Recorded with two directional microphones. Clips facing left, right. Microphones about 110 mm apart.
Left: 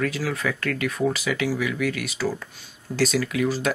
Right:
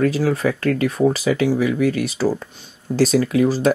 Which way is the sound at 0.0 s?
35° right (ahead or behind).